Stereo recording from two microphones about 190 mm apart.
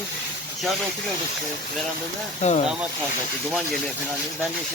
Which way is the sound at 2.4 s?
35° left (ahead or behind).